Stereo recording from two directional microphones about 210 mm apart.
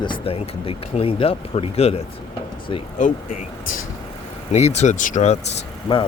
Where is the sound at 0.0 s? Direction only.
25° left (ahead or behind).